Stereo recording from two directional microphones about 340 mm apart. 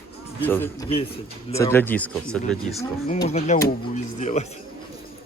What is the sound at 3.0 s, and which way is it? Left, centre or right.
Speech, left.